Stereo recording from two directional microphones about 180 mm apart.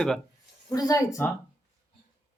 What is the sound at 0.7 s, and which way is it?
Speech, 20° left (ahead or behind).